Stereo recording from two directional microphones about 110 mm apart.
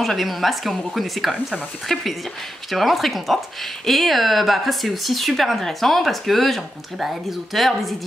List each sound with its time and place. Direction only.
0.0 s speech: centre (ahead or behind)